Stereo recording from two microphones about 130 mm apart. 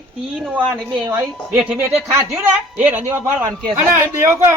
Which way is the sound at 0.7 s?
20° right (ahead or behind).